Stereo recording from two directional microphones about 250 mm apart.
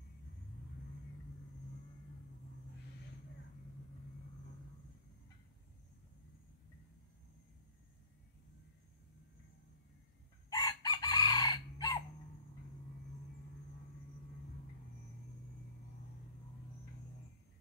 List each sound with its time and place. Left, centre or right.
10.5 s chicken: centre